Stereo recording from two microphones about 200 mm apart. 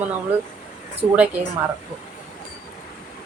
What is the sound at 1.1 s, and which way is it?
Speech, 5° right (ahead or behind).